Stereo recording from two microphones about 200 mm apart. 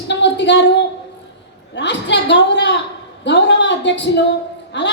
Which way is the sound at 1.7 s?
60° left (ahead or behind).